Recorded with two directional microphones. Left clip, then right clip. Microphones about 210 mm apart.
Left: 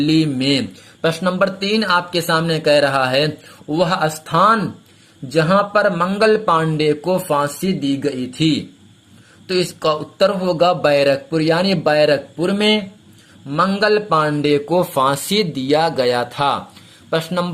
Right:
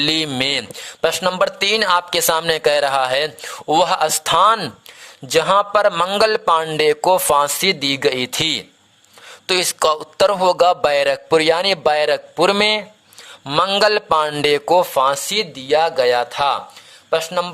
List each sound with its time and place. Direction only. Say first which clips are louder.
0.0 s speech: left 1 dB; 45° right (ahead or behind)
1.0 s speech: even; 35° right (ahead or behind)
14.9 s speech: even; 15° right (ahead or behind)